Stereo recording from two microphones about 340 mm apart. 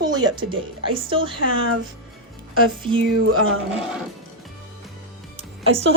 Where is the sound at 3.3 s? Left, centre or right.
Right.